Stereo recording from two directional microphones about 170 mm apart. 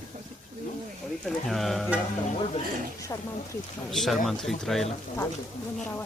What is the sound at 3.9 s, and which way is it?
Mantra, centre (ahead or behind).